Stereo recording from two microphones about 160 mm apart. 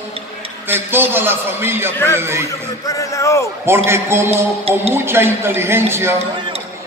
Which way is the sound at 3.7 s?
15° right (ahead or behind).